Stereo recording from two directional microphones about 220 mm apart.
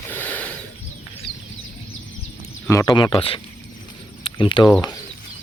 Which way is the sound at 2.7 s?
15° left (ahead or behind).